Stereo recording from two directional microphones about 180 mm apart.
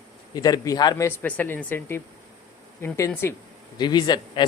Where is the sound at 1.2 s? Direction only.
10° left (ahead or behind).